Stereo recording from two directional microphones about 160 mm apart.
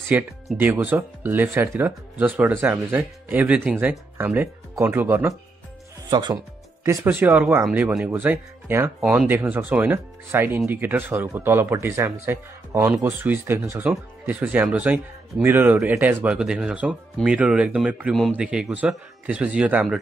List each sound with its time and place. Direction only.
0.1 s speech: 10° right (ahead or behind)
6.0 s speech: 25° right (ahead or behind); by 20.0 s 5° right (ahead or behind)